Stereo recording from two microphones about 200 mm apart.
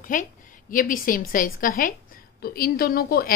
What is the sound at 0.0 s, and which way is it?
A woman's voice, 40° left (ahead or behind).